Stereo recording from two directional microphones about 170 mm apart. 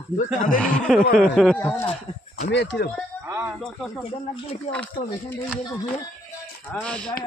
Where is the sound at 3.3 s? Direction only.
10° right (ahead or behind).